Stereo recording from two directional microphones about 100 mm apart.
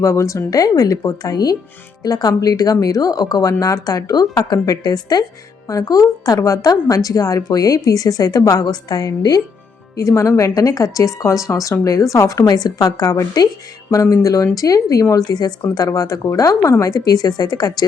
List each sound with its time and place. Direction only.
0.0 s speech: 30° left (ahead or behind)